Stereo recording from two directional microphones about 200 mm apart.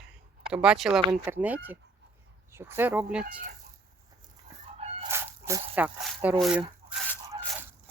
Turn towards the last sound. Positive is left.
turn(degrees=-25)  # may be behind; listen again after turning